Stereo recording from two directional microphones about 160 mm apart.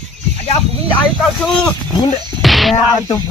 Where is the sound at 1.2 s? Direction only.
5° left (ahead or behind).